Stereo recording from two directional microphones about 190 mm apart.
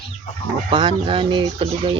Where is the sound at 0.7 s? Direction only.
25° right (ahead or behind).